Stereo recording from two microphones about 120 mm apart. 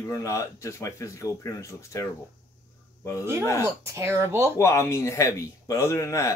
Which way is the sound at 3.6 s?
25° right (ahead or behind).